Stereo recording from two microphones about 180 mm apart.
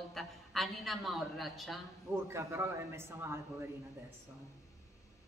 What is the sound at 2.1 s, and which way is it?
A man's voice, 15° right (ahead or behind).